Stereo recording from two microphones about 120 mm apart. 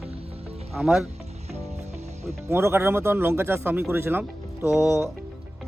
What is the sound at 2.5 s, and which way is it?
Speech, 20° right (ahead or behind).